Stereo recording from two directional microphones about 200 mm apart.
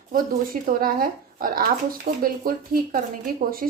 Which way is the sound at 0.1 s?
45° right (ahead or behind).